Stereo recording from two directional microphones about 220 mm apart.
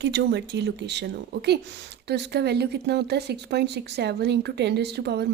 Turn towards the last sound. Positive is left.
turn(degrees=-50)  # may be behind; listen again after turning